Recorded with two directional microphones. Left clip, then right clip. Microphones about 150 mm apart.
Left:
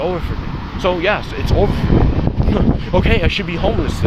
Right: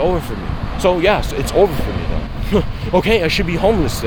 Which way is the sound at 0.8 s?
35° right (ahead or behind).